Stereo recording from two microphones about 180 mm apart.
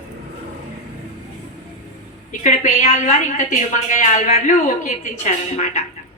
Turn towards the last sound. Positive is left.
turn(degrees=40)  # may be behind; listen again after turning